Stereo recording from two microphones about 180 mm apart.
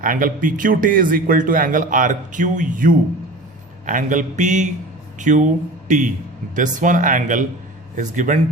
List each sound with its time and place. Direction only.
0.0 s speech: 50° right (ahead or behind)
6.6 s speech: 45° right (ahead or behind)